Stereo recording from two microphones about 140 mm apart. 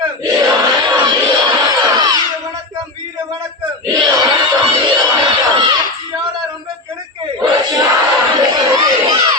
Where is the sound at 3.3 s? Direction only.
30° right (ahead or behind).